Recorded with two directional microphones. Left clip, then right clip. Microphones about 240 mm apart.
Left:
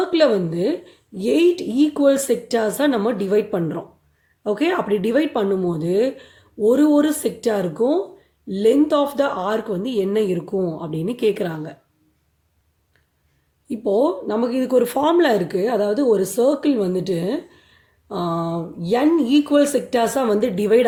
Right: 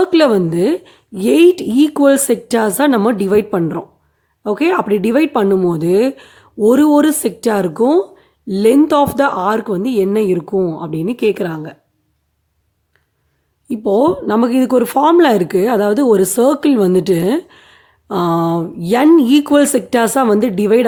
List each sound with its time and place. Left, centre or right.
0.0 s speech: right
13.7 s speech: right